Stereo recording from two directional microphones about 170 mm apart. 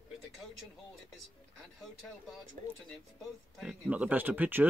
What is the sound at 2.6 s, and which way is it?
Speech, 45° right (ahead or behind).